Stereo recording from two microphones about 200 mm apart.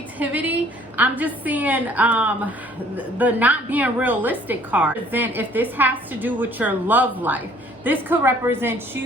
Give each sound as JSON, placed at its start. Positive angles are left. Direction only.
{"t": 0.2, "sound": "a woman's voice", "side_deg": -10}